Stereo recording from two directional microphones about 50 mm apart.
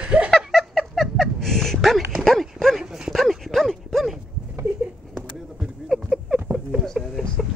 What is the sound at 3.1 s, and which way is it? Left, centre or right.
Dog, centre.